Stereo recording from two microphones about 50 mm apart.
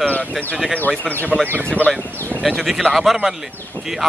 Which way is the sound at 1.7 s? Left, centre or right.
Centre.